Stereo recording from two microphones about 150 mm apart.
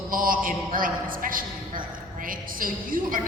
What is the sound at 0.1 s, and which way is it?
A woman's voice, 65° right (ahead or behind).